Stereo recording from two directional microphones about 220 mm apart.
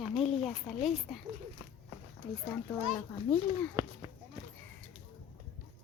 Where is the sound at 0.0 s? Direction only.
Centre (ahead or behind).